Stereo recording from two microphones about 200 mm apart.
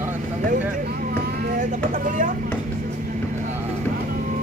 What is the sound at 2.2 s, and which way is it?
Speech, 45° right (ahead or behind).